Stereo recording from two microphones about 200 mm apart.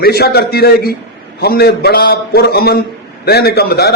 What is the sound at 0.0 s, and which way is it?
A man's voice, 50° left (ahead or behind).